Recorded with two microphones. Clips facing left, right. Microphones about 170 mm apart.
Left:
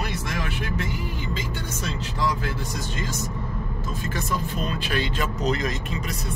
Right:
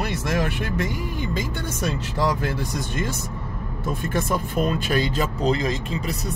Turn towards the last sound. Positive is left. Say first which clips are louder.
# right 3 dB
turn(degrees=-30)  # may be behind; listen again after turning